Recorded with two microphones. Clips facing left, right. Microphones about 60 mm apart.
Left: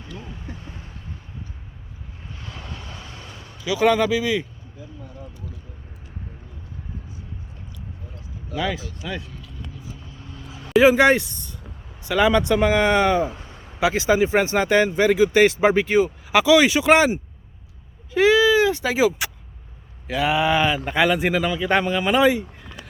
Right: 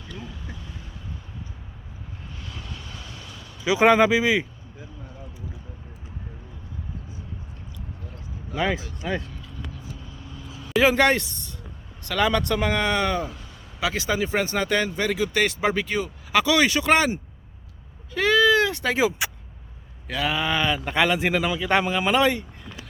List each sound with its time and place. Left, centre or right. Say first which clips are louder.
0.2 s vehicle: left 1 dB; left
2.4 s vehicle: left 3 dB; left
3.6 s speech: right 2 dB; right
8.5 s vehicle: right 1 dB; right
10.7 s speech: left 4 dB; centre
13.3 s a sound: left 3 dB; left
13.7 s speech: left 6 dB; left; by 19.3 s centre
20.1 s speech: left 5 dB; centre
20.7 s speech: left 2 dB; centre